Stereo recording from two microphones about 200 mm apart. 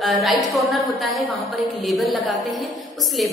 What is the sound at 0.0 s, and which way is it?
A woman's voice, centre (ahead or behind).